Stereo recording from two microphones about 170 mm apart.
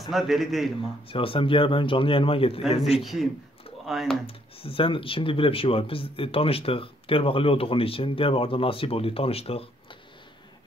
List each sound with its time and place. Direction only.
0.1 s a man's voice: centre (ahead or behind)
1.0 s speech: 30° left (ahead or behind)
3.0 s a man's voice: centre (ahead or behind)
4.3 s speech: 35° left (ahead or behind)